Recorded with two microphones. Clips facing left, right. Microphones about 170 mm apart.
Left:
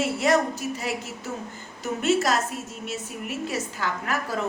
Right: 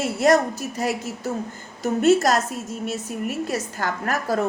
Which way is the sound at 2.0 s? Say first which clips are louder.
Right 5 dB; 40° right (ahead or behind).